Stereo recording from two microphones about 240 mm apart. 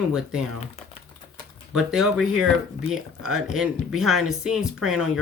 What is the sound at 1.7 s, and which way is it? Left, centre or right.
Speech, centre.